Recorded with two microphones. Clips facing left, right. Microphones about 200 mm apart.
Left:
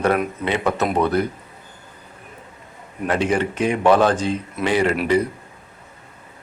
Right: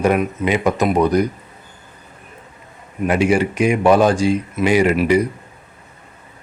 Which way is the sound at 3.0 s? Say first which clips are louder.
Right 4 dB; 10° right (ahead or behind).